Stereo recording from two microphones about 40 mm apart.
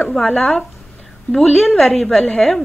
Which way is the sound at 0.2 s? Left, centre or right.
Centre.